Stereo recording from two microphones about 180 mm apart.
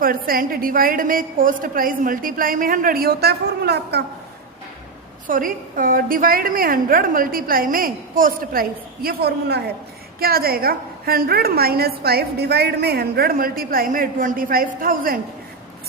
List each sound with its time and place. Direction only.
0.0 s a woman's voice: 55° right (ahead or behind)
5.3 s a woman's voice: 50° right (ahead or behind)